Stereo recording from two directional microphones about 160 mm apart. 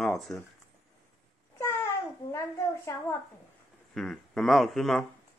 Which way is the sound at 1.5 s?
15° left (ahead or behind).